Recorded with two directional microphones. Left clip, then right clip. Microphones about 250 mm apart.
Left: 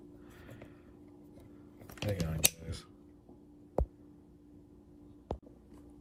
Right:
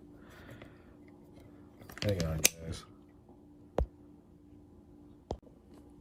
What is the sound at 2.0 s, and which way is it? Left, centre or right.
Speech, centre.